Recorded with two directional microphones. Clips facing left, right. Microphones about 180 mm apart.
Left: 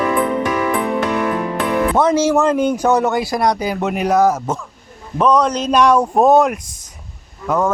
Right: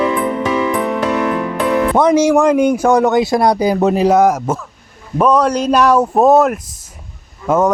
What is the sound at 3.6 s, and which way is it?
Speech, 35° right (ahead or behind).